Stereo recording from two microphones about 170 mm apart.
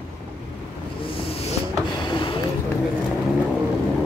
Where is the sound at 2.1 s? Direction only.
30° left (ahead or behind).